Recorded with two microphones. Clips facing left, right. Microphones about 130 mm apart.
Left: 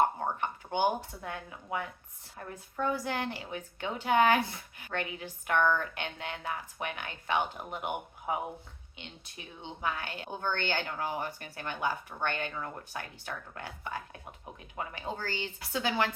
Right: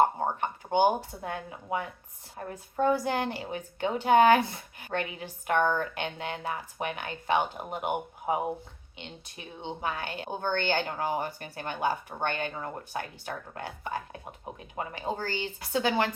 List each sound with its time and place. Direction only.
0.0 s a sound: 35° right (ahead or behind)
0.4 s a woman's voice: 25° right (ahead or behind); by 3.1 s 40° right (ahead or behind)
3.1 s a woman's voice: 25° right (ahead or behind)
3.5 s a woman's voice: 35° right (ahead or behind)
10.8 s speech: 35° right (ahead or behind)
12.2 s a woman's voice: 20° right (ahead or behind)
12.5 s a woman's voice: 35° right (ahead or behind)